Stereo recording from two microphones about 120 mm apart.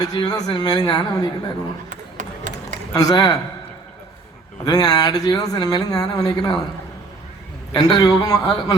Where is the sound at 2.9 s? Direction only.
30° left (ahead or behind).